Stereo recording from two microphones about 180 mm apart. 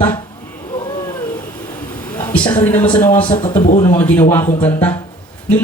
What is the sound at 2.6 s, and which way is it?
Speech, 10° left (ahead or behind).